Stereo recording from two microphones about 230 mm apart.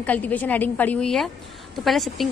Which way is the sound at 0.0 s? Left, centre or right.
Centre.